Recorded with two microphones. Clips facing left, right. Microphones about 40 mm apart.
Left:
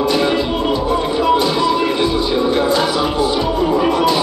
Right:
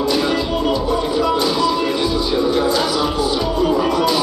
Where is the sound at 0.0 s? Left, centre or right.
Left.